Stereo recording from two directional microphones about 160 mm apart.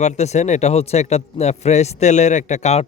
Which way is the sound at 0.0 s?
45° left (ahead or behind).